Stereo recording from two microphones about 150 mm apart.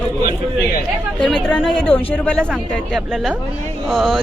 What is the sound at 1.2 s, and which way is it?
Speech, centre (ahead or behind).